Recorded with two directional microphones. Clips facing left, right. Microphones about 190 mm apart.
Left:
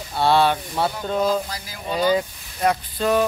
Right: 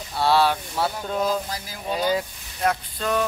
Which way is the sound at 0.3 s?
Centre (ahead or behind).